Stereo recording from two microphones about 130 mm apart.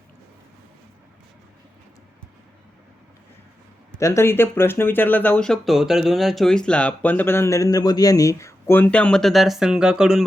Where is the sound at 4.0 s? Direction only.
20° left (ahead or behind).